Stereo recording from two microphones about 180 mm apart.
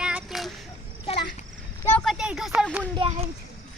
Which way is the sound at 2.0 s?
Centre (ahead or behind).